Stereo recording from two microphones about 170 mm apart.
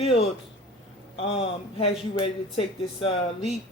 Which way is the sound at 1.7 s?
35° left (ahead or behind).